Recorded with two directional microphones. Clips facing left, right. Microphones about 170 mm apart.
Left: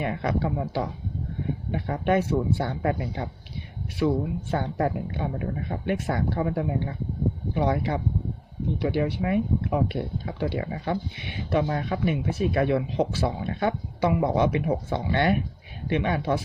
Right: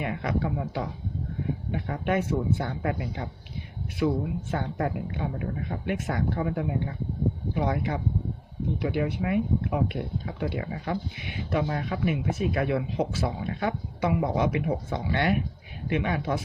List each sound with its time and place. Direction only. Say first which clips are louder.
0.0 s speech: left 2 dB; 35° left (ahead or behind)
4.5 s speech: left 4 dB; 35° left (ahead or behind)